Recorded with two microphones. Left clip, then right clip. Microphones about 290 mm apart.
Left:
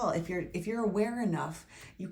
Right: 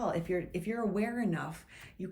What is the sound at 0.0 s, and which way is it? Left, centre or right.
Speech, centre.